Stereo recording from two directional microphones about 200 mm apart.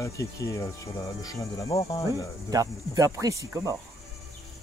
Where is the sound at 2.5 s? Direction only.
20° right (ahead or behind).